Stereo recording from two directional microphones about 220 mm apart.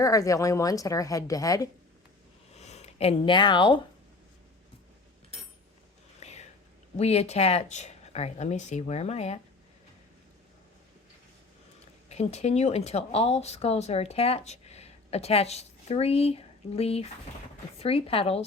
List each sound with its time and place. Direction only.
0.0 s a woman's voice: 15° left (ahead or behind)
2.6 s speech: 30° left (ahead or behind)
6.1 s whispering: 30° left (ahead or behind)
6.9 s speech: 30° left (ahead or behind)
12.0 s speech: 30° left (ahead or behind)